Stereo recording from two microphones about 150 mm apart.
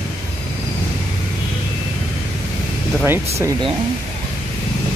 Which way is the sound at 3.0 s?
15° right (ahead or behind).